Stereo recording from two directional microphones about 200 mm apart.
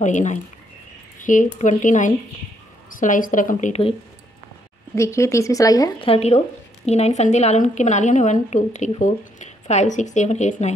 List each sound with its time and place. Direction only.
0.0 s a woman's voice: 35° left (ahead or behind)
4.9 s a woman's voice: 15° left (ahead or behind); by 10.7 s 35° left (ahead or behind)